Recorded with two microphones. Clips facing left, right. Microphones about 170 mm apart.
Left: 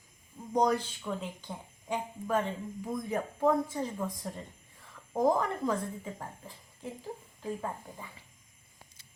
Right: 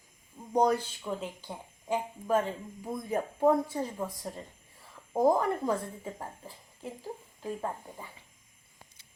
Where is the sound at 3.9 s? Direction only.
20° right (ahead or behind).